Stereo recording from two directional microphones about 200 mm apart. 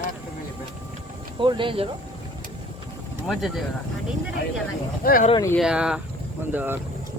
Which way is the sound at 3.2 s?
Centre (ahead or behind).